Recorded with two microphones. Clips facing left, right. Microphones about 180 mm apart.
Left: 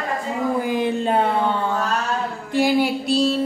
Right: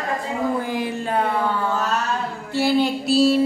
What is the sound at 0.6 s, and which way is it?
Speech, 20° left (ahead or behind).